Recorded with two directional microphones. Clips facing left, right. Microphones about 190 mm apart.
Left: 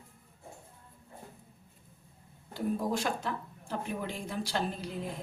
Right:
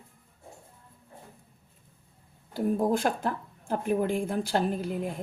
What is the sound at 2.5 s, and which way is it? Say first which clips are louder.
A woman's voice: right 6 dB; 45° right (ahead or behind).